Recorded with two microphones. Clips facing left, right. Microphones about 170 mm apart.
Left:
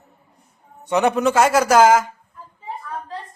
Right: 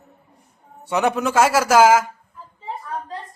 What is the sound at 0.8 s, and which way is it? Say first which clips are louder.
A man's voice: left 3 dB; 5° right (ahead or behind).